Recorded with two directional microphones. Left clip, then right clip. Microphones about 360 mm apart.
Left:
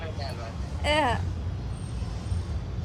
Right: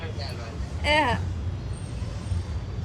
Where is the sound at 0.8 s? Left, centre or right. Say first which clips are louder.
Right 2 dB; centre.